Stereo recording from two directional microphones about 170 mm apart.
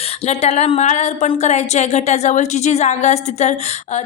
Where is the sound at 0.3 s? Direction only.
40° left (ahead or behind).